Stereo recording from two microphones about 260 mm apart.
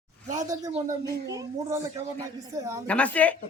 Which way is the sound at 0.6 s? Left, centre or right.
Centre.